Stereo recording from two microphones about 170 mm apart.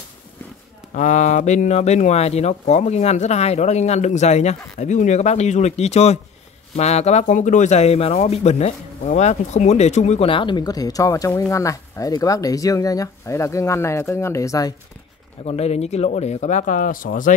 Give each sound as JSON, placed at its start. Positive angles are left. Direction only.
{"t": 0.9, "sound": "speech", "side_deg": 45}
{"t": 15.4, "sound": "speech", "side_deg": 40}